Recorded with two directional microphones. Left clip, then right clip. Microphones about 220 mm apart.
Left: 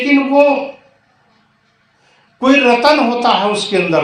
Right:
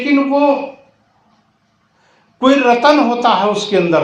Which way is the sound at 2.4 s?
15° right (ahead or behind).